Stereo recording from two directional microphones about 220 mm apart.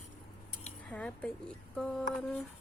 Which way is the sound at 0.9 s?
5° left (ahead or behind).